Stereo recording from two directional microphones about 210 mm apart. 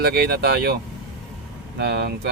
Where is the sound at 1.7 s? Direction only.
50° right (ahead or behind).